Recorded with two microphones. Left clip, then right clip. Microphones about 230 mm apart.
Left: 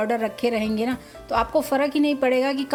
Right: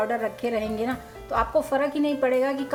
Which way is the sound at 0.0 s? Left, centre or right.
Left.